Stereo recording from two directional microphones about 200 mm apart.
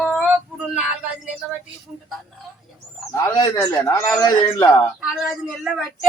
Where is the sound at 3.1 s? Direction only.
20° left (ahead or behind).